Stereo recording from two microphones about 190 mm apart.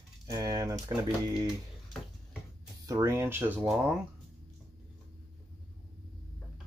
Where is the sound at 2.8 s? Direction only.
15° right (ahead or behind).